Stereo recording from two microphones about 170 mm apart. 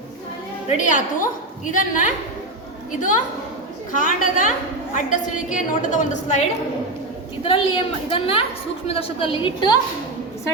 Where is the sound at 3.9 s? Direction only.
50° left (ahead or behind).